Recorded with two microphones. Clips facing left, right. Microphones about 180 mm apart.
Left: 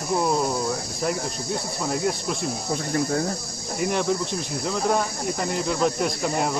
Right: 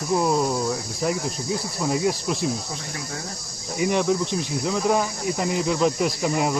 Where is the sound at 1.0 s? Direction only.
Centre (ahead or behind).